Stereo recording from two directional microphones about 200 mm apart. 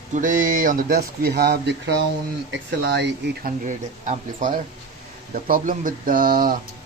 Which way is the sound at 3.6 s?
40° right (ahead or behind).